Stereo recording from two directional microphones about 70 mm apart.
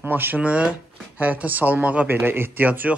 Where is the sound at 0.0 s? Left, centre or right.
Right.